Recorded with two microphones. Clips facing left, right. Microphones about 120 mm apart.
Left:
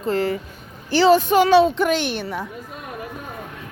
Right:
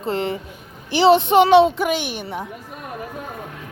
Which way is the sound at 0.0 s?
25° right (ahead or behind).